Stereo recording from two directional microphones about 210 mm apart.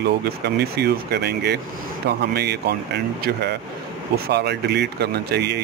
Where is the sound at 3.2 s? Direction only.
50° right (ahead or behind).